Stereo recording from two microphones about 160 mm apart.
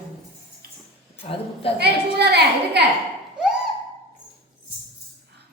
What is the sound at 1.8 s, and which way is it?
A woman's voice, 90° right.